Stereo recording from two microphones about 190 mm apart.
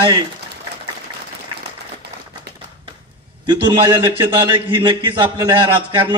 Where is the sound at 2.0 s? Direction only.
60° right (ahead or behind).